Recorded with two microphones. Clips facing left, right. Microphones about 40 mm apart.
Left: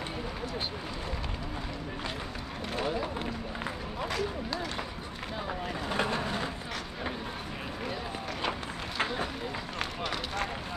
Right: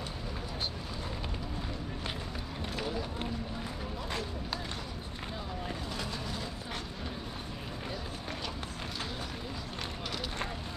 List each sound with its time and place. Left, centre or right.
5.9 s vehicle: left
8.4 s run: left